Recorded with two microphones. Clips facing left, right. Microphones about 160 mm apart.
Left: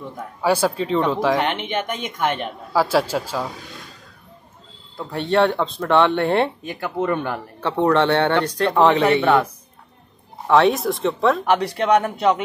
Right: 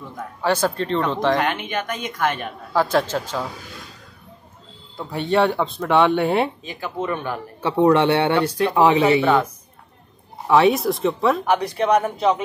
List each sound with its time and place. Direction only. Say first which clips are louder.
0.4 s speech: left 1 dB; 10° left (ahead or behind)
1.4 s a woman's voice: left 1 dB; 25° left (ahead or behind)
2.7 s speech: left 1 dB; 5° left (ahead or behind)
4.9 s speech: left 1 dB; centre (ahead or behind)
6.6 s speech: left 3 dB; 55° left (ahead or behind)
7.6 s a man's voice: right 2 dB; 10° right (ahead or behind)
10.4 s speech: even; 5° right (ahead or behind)
11.7 s speech: left 1 dB; 75° left (ahead or behind)